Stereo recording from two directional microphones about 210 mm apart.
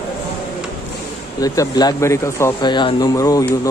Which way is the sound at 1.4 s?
20° left (ahead or behind).